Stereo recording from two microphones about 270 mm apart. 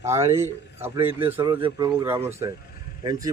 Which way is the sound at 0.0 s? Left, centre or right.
Centre.